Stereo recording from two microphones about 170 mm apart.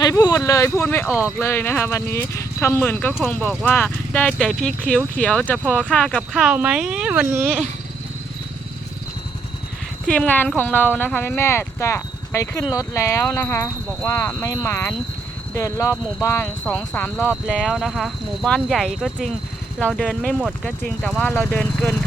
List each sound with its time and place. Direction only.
0.0 s speech: 20° left (ahead or behind)
1.0 s speech: 5° right (ahead or behind)
1.4 s speech: 15° left (ahead or behind); by 7.5 s 10° right (ahead or behind)
10.1 s speech: 5° left (ahead or behind)